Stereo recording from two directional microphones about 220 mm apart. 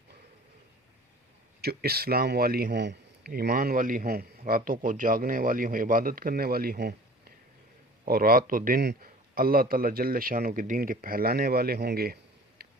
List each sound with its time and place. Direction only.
1.6 s a man's voice: 45° right (ahead or behind)
12.6 s tick-tock: 45° right (ahead or behind)